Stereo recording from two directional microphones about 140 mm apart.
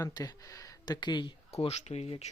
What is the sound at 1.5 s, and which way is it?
Speech, 50° left (ahead or behind).